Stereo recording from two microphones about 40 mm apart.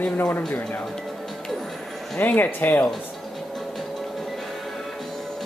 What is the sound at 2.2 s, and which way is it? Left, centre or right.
Speech, left.